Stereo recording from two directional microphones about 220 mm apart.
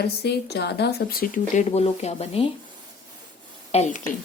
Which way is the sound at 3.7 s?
30° left (ahead or behind).